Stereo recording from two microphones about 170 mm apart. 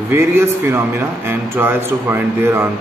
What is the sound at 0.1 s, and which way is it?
Speech, 15° right (ahead or behind).